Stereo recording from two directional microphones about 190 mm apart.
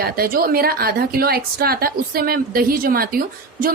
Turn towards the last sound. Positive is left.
turn(degrees=-50)  # may be behind; listen again after turning